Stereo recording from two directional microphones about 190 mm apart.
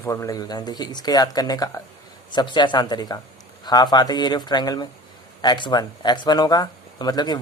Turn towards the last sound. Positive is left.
turn(degrees=20)  # may be behind; listen again after turning